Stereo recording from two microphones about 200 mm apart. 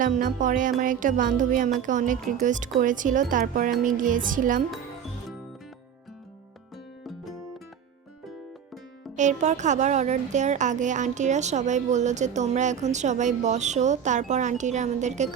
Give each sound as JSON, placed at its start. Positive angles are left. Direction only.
{"t": 0.0, "sound": "speech", "side_deg": -40}
{"t": 7.0, "sound": "music", "side_deg": 0}
{"t": 9.1, "sound": "speech", "side_deg": -35}